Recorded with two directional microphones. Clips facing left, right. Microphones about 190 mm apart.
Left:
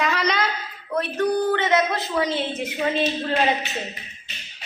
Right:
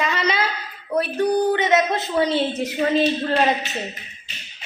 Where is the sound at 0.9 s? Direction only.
15° right (ahead or behind); by 2.4 s 30° right (ahead or behind).